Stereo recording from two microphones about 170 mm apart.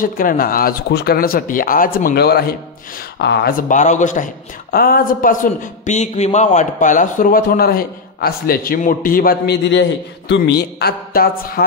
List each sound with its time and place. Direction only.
0.0 s speech: 55° left (ahead or behind)
4.6 s speech: 65° left (ahead or behind)